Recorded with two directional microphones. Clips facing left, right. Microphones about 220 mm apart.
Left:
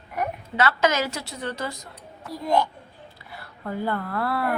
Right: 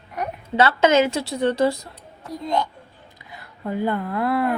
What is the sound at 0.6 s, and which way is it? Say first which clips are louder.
A woman's voice: right 6 dB; 25° right (ahead or behind).